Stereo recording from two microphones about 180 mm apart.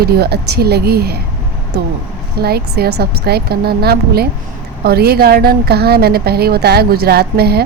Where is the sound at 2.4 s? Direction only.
60° right (ahead or behind).